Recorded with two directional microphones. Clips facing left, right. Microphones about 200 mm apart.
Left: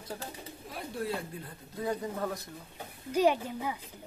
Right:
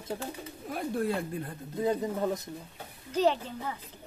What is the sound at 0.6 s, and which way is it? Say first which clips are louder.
Speech: right 7 dB; 50° right (ahead or behind).